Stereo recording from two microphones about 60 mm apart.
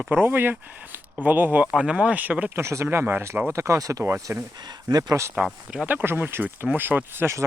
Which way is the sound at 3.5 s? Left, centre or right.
Right.